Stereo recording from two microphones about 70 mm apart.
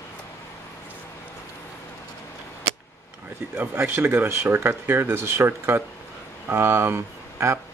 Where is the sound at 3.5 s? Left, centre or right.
Right.